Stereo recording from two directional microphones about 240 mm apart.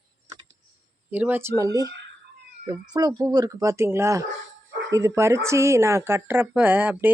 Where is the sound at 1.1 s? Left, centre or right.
Centre.